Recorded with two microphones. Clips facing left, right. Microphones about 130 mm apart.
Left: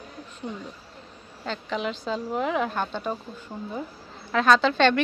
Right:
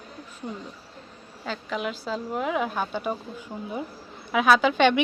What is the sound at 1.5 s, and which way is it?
Speech, 5° right (ahead or behind).